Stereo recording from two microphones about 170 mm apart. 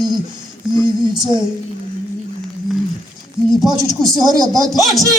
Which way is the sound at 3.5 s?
Centre (ahead or behind).